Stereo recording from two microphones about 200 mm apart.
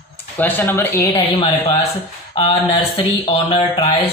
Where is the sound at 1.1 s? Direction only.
25° left (ahead or behind).